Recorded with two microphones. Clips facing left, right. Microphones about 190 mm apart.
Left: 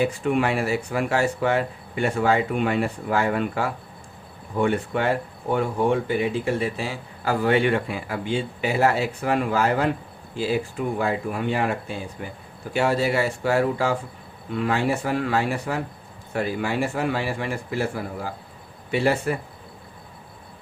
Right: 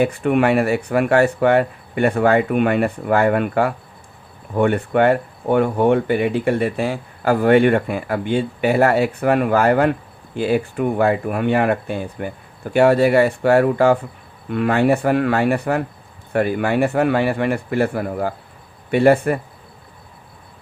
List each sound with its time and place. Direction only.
0.0 s speech: 60° right (ahead or behind)